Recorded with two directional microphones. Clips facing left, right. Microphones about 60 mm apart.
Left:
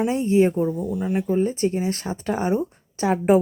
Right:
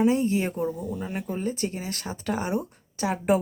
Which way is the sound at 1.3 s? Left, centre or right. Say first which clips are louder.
Left 8 dB; left.